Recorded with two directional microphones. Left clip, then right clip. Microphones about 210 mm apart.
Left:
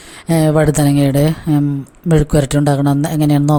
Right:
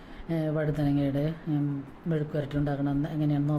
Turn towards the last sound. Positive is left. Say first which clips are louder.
# left 15 dB
turn(degrees=50)  # may be behind; listen again after turning